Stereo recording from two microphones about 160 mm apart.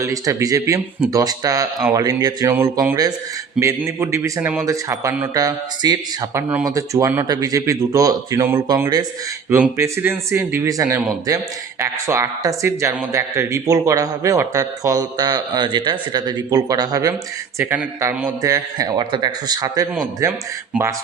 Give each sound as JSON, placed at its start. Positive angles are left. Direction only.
{"t": 0.0, "sound": "a man's voice", "side_deg": -20}
{"t": 18.4, "sound": "a man's voice", "side_deg": -25}